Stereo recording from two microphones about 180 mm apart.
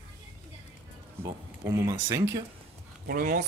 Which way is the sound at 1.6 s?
15° right (ahead or behind).